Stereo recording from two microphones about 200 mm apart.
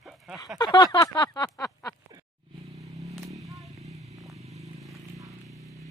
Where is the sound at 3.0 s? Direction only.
15° right (ahead or behind).